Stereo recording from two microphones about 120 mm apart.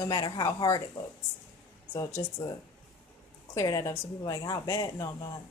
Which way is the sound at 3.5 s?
30° left (ahead or behind).